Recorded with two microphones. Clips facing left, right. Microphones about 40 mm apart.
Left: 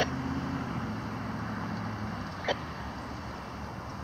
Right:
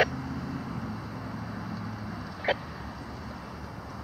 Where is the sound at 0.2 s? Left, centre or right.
Left.